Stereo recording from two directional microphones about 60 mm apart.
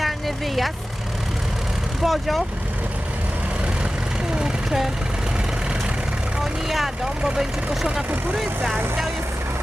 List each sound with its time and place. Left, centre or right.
0.0 s vehicle: centre
2.0 s speech: centre
4.4 s vehicle: centre
6.4 s speech: centre